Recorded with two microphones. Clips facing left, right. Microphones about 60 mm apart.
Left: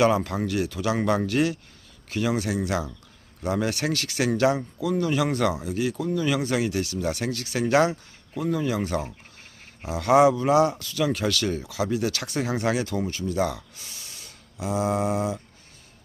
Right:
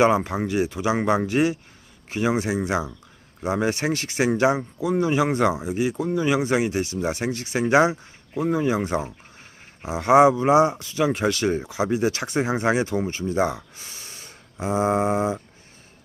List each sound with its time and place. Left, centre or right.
0.0 s speech: right